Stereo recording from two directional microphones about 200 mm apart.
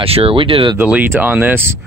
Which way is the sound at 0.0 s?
30° right (ahead or behind).